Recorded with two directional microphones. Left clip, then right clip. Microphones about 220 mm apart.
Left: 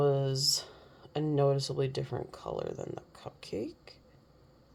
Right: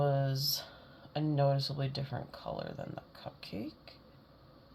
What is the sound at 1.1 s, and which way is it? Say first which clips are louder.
Speech: left 3 dB; 55° left (ahead or behind).